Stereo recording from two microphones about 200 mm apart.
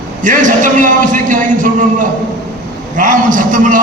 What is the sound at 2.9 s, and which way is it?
Speech, 40° right (ahead or behind).